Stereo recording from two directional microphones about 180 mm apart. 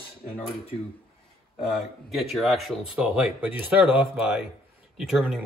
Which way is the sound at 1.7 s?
Centre (ahead or behind).